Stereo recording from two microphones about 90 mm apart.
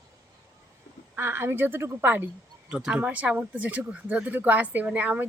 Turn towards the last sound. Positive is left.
turn(degrees=-20)  # may be behind; listen again after turning